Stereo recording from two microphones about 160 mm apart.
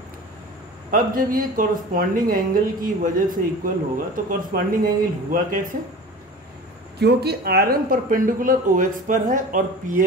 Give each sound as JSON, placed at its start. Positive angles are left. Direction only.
{"t": 0.9, "sound": "speech", "side_deg": -60}
{"t": 7.0, "sound": "speech", "side_deg": -90}